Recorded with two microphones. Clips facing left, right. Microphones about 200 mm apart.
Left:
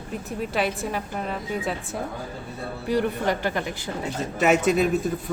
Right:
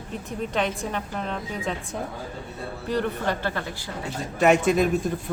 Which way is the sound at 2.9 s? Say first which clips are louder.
Left 2 dB; 15° left (ahead or behind).